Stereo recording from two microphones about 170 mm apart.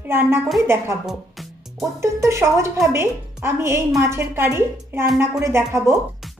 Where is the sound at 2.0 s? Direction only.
15° right (ahead or behind).